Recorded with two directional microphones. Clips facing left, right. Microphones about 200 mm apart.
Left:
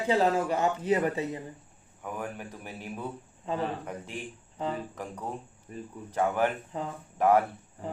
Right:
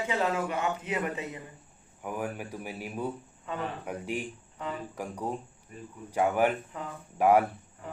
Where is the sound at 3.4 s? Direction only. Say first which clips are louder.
Left 4 dB; 30° left (ahead or behind).